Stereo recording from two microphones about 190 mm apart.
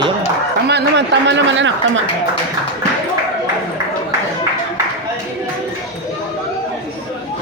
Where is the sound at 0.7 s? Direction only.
65° right (ahead or behind).